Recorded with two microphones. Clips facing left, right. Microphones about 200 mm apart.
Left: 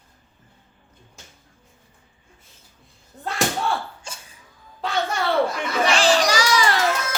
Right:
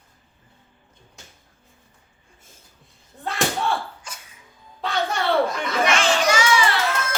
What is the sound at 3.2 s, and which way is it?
Slam, centre (ahead or behind).